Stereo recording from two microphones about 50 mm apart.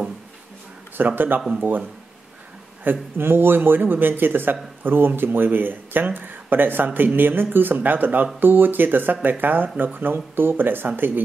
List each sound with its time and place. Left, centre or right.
0.9 s speech: right
1.6 s speech: right
2.8 s speech: right